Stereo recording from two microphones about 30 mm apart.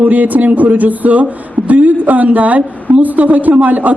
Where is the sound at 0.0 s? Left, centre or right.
Right.